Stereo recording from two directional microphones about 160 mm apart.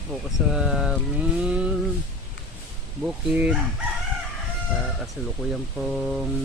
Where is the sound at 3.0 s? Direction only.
10° right (ahead or behind).